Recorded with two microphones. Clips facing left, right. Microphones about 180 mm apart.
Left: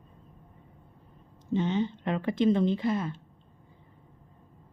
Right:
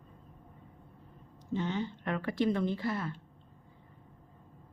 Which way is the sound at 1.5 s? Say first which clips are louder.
Left 6 dB; 20° left (ahead or behind).